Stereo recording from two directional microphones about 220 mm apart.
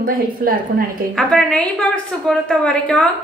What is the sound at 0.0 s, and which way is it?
Speech, 40° right (ahead or behind).